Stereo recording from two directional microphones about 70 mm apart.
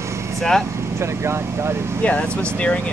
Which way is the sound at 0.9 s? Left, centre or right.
Right.